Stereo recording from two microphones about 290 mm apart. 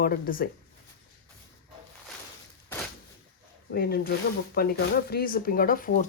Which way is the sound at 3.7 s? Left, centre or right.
Left.